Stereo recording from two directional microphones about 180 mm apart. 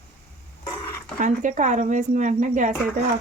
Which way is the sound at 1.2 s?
45° right (ahead or behind).